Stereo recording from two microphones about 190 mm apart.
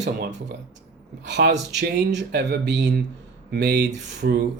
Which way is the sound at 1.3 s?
65° right (ahead or behind).